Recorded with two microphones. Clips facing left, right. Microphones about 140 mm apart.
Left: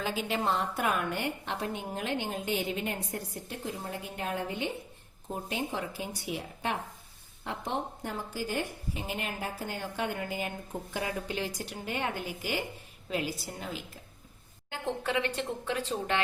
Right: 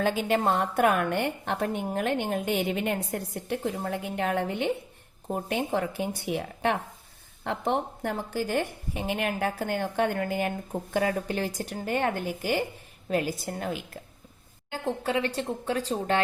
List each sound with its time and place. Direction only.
0.0 s a woman's voice: 55° right (ahead or behind)
15.0 s a woman's voice: 35° right (ahead or behind)